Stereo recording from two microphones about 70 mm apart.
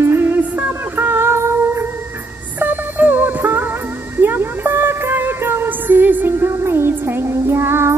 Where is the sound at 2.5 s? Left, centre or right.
Right.